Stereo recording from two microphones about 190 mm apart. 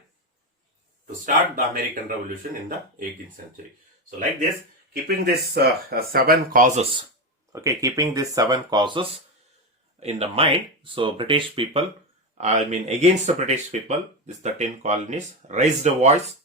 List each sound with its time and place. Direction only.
1.2 s speech: 50° right (ahead or behind)
5.0 s speech: 55° right (ahead or behind)
7.5 s speech: 15° right (ahead or behind); by 16.1 s 35° right (ahead or behind)